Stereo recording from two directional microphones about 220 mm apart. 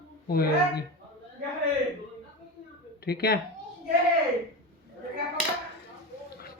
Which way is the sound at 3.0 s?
45° left (ahead or behind).